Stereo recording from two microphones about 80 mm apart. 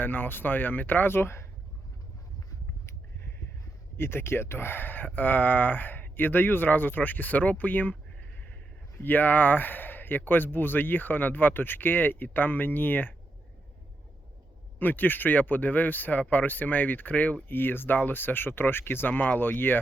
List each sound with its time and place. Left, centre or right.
0.0 s speech: left
3.9 s speech: left
9.0 s speech: left
14.8 s speech: left